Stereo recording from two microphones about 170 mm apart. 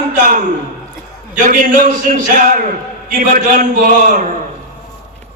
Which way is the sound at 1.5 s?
50° right (ahead or behind).